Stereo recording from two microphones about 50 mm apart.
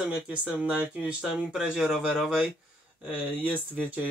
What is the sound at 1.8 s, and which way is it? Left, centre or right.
Speech, centre.